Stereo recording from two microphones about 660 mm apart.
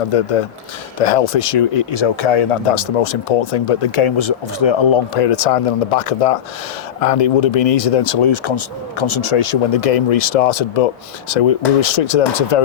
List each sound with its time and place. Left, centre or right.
0.1 s speech: left
1.0 s speech: left
1.5 s speech: left
2.4 s speech: left
11.3 s speech: left